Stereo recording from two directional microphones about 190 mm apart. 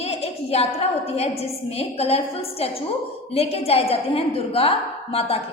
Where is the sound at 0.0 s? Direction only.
35° left (ahead or behind).